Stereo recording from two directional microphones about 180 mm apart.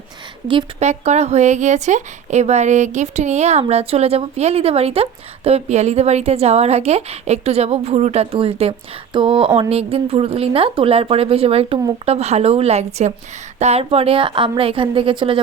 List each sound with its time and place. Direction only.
0.4 s a woman's voice: 35° right (ahead or behind)